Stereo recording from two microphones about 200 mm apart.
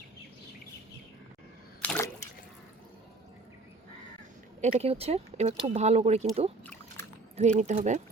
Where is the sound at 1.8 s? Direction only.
10° left (ahead or behind).